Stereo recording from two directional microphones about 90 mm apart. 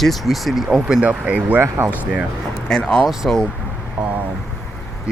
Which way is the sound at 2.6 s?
5° left (ahead or behind).